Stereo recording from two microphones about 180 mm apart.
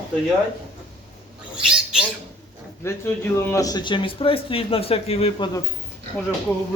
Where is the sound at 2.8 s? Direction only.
15° left (ahead or behind); by 5.5 s 35° left (ahead or behind).